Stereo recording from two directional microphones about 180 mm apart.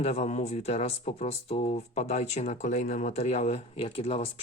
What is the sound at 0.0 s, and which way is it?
Speech, 35° left (ahead or behind).